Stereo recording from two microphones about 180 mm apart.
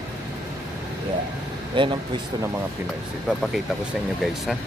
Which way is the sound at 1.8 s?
25° right (ahead or behind).